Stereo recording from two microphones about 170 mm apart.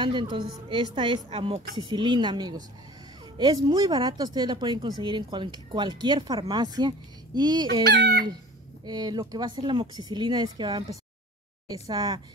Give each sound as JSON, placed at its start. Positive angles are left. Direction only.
{"t": 0.0, "sound": "speech", "side_deg": -25}
{"t": 7.8, "sound": "chicken", "side_deg": -70}
{"t": 8.8, "sound": "speech", "side_deg": -25}